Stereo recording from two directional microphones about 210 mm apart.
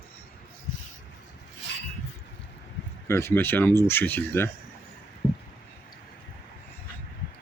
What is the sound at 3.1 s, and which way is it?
Speech, 10° left (ahead or behind).